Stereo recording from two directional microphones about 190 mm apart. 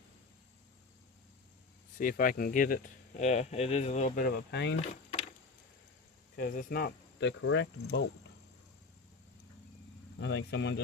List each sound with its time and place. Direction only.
2.0 s speech: 45° left (ahead or behind)
6.3 s speech: 50° left (ahead or behind); by 8.0 s 75° left (ahead or behind)
10.2 s speech: 70° left (ahead or behind)